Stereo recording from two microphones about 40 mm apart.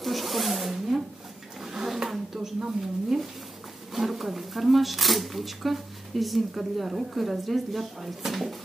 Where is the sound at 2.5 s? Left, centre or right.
Centre.